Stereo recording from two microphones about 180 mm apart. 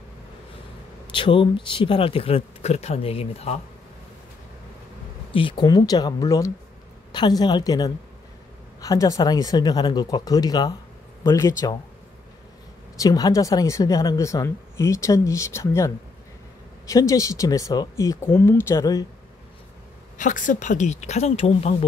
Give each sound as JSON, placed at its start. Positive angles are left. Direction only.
{"t": 1.1, "sound": "speech", "side_deg": 30}
{"t": 5.3, "sound": "speech", "side_deg": 30}
{"t": 13.0, "sound": "speech", "side_deg": 20}
{"t": 16.9, "sound": "speech", "side_deg": 20}
{"t": 20.2, "sound": "speech", "side_deg": 45}